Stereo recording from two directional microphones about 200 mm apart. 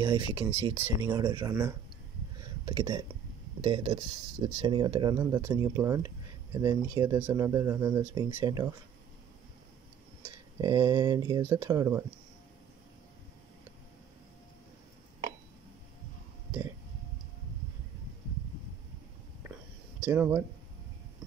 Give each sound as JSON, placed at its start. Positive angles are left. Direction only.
{"t": 0.0, "sound": "speech", "side_deg": -20}
{"t": 10.6, "sound": "speech", "side_deg": -20}
{"t": 20.1, "sound": "speech", "side_deg": -15}